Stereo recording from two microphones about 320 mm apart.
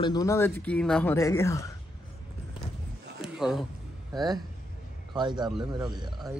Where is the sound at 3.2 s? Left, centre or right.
Centre.